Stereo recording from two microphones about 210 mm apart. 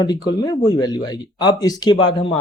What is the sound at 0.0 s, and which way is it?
Speech, 20° left (ahead or behind).